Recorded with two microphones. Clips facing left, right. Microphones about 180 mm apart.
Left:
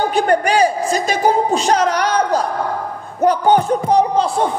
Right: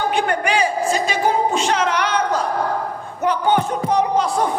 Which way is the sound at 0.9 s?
40° left (ahead or behind).